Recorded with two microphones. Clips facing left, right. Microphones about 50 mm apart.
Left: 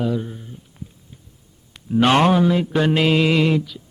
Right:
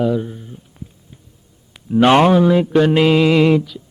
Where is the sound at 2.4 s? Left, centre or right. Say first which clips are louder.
Right 5 dB; centre.